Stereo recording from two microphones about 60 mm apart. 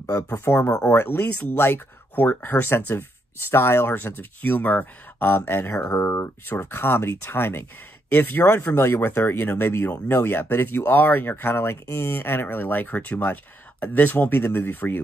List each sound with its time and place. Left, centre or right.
0.0 s speech: left
0.8 s speech: left
4.0 s speech: left